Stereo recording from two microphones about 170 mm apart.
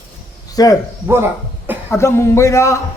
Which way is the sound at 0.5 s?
20° left (ahead or behind).